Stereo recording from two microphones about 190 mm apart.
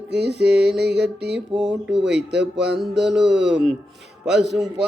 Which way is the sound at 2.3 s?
65° right (ahead or behind).